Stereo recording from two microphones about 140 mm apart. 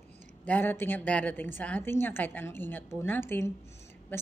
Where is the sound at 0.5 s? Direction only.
15° left (ahead or behind).